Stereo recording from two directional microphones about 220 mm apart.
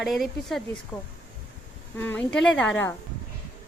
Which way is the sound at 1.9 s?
10° left (ahead or behind).